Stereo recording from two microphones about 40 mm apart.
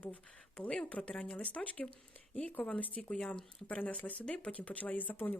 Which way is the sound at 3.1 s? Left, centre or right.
Centre.